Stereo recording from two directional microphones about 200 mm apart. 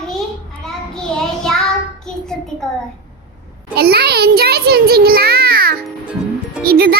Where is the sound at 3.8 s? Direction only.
50° right (ahead or behind).